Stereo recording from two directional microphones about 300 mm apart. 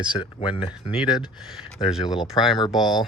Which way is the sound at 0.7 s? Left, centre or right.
Centre.